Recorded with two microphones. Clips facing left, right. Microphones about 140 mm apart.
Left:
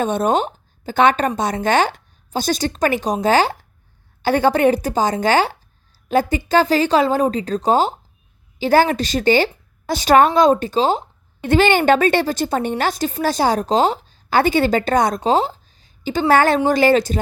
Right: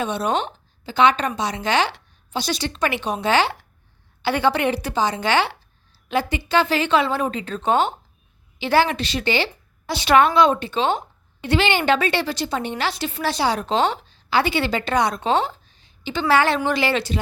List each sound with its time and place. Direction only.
0.0 s a woman's voice: 45° left (ahead or behind)
11.4 s a woman's voice: 45° left (ahead or behind)